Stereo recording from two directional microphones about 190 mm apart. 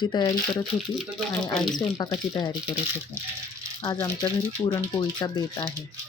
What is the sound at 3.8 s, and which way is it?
Speech, 20° left (ahead or behind).